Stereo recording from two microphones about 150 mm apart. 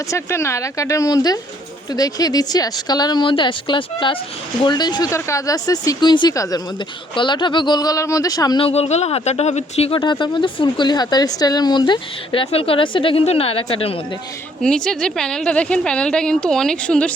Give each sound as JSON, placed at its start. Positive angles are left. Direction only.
{"t": 0.1, "sound": "speech", "side_deg": 20}
{"t": 8.6, "sound": "speech", "side_deg": 45}
{"t": 10.0, "sound": "speech", "side_deg": 30}
{"t": 14.6, "sound": "speech", "side_deg": 5}